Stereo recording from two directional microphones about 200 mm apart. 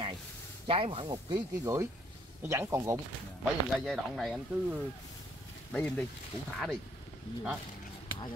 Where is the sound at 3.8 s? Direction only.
Centre (ahead or behind).